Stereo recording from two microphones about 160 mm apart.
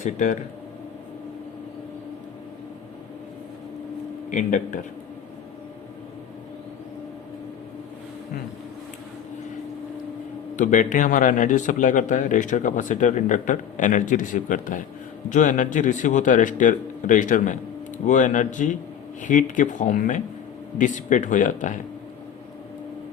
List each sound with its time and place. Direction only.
0.0 s speech: 50° left (ahead or behind)
4.3 s speech: 50° left (ahead or behind)
10.6 s speech: 55° left (ahead or behind)